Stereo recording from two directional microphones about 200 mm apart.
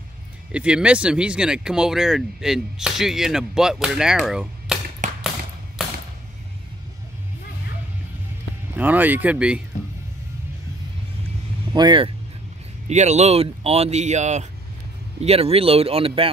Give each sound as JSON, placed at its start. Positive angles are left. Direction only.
{"t": 0.5, "sound": "speech", "side_deg": -5}
{"t": 5.0, "sound": "a sound", "side_deg": -40}
{"t": 8.7, "sound": "speech", "side_deg": -10}
{"t": 11.7, "sound": "speech", "side_deg": -25}
{"t": 12.8, "sound": "speech", "side_deg": -35}